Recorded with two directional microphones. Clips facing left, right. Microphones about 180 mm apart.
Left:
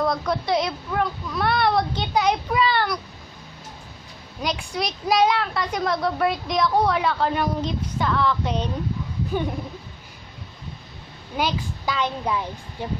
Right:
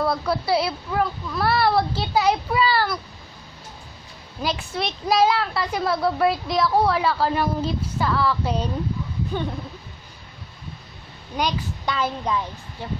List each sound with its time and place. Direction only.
0.0 s a woman's voice: 5° right (ahead or behind)
4.4 s a woman's voice: 5° right (ahead or behind)
9.3 s speech: 15° left (ahead or behind)
11.3 s a woman's voice: 5° left (ahead or behind)
12.3 s speech: 15° left (ahead or behind)